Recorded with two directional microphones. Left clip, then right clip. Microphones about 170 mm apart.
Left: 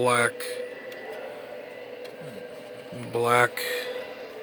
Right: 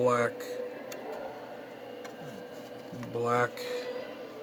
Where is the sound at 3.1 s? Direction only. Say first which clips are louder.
Left 7 dB; 25° left (ahead or behind).